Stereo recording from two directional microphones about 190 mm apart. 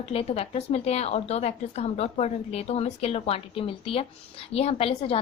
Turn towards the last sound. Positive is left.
turn(degrees=30)  # may be behind; listen again after turning